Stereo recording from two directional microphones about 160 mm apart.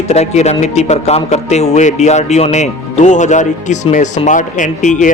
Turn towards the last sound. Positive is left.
turn(degrees=50)  # may be behind; listen again after turning